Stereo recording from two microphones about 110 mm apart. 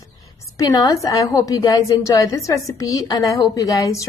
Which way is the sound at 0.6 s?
35° left (ahead or behind).